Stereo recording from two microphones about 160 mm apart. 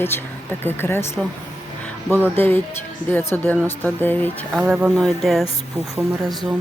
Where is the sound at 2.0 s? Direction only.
15° right (ahead or behind).